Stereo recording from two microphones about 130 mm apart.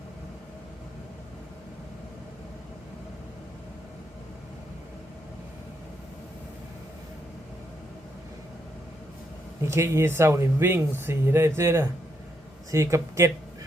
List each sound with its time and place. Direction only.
9.6 s speech: 20° right (ahead or behind)